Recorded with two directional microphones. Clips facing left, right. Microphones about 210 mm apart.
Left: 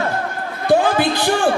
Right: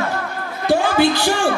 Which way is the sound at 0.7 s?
55° left (ahead or behind).